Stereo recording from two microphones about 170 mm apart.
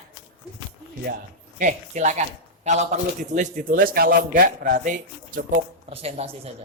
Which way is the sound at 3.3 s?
55° right (ahead or behind).